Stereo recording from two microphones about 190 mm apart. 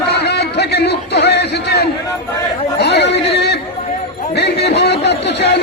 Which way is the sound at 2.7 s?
65° left (ahead or behind).